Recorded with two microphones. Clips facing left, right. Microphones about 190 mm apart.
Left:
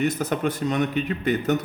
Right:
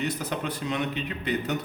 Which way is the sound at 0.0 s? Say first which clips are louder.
Left 6 dB; 45° left (ahead or behind).